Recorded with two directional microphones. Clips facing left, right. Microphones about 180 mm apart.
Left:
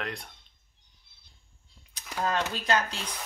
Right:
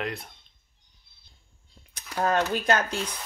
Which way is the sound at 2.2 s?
50° right (ahead or behind).